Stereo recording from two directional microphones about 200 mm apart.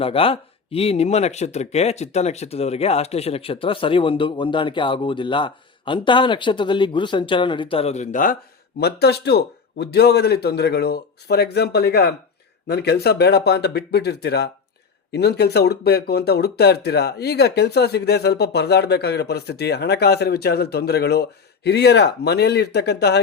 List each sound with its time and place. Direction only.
0.0 s speech: 30° left (ahead or behind)
8.8 s speech: 55° left (ahead or behind)